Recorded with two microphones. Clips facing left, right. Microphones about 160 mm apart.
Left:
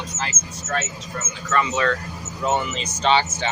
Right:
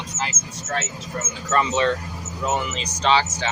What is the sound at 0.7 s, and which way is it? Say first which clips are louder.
Speech: even; 30° right (ahead or behind).